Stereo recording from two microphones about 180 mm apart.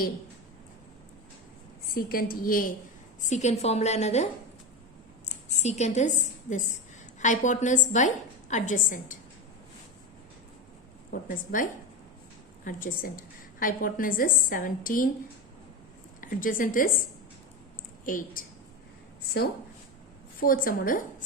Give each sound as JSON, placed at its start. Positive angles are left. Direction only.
{"t": 2.0, "sound": "a woman's voice", "side_deg": 55}
{"t": 3.2, "sound": "a woman's voice", "side_deg": 40}
{"t": 11.1, "sound": "a woman's voice", "side_deg": 50}
{"t": 16.2, "sound": "a woman's voice", "side_deg": 50}
{"t": 18.0, "sound": "a woman's voice", "side_deg": 50}
{"t": 20.4, "sound": "a woman's voice", "side_deg": 50}